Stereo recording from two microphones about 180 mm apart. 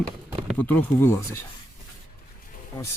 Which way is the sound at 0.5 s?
10° left (ahead or behind).